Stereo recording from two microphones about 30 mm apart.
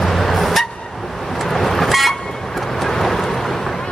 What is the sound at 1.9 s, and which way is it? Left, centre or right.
Vehicle, centre.